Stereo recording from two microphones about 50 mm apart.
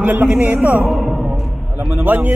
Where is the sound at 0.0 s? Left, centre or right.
Right.